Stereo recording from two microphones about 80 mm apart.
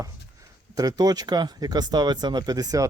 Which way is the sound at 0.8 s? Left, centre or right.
Right.